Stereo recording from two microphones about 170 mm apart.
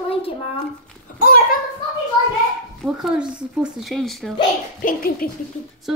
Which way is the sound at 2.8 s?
5° right (ahead or behind).